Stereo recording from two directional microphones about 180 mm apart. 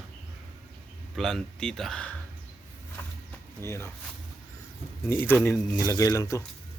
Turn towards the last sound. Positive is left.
turn(degrees=15)  # may be behind; listen again after turning